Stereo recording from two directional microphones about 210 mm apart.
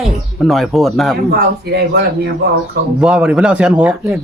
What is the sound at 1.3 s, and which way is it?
Speech, 50° right (ahead or behind).